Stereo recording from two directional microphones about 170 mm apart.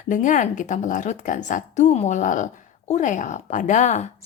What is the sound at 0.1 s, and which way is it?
A woman's voice, 50° left (ahead or behind).